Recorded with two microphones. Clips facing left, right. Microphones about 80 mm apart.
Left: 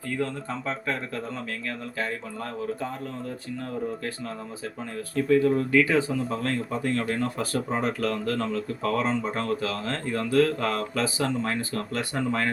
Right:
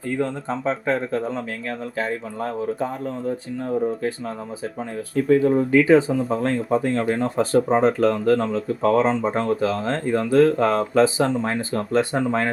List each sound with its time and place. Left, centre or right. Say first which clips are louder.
0.2 s speech: right 5 dB; right
5.1 s speech: right 4 dB; centre